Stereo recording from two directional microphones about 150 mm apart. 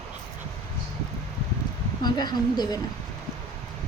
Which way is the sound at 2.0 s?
30° left (ahead or behind).